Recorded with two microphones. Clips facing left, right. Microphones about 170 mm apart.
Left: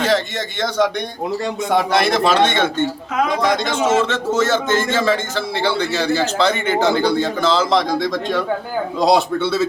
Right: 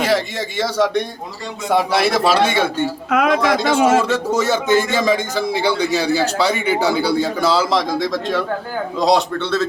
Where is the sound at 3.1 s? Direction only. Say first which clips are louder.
Right 7 dB; 70° right (ahead or behind).